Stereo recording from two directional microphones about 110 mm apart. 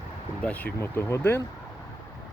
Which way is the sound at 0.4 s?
15° left (ahead or behind).